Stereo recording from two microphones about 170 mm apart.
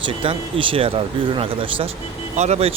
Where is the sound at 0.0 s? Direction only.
30° right (ahead or behind).